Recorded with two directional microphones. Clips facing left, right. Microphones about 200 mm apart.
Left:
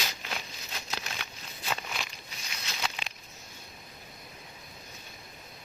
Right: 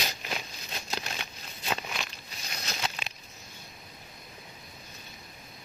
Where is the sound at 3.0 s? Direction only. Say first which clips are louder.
Even; 15° left (ahead or behind).